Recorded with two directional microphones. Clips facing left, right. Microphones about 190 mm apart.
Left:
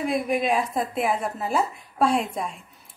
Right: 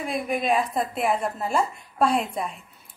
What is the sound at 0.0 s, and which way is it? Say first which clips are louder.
A woman's voice: left 3 dB; centre (ahead or behind).